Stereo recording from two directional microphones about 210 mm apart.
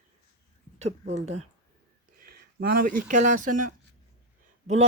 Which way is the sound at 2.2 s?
45° right (ahead or behind).